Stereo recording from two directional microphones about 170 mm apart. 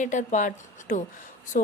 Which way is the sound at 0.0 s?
45° left (ahead or behind).